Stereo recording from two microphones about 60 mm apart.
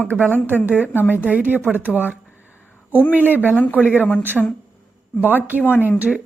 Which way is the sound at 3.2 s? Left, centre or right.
Right.